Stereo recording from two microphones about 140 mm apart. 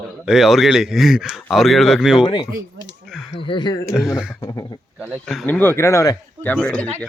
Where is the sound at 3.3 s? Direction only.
35° left (ahead or behind).